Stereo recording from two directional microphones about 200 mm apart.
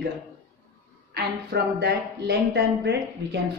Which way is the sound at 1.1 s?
55° right (ahead or behind).